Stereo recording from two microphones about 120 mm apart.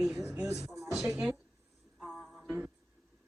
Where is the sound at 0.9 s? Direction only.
5° right (ahead or behind).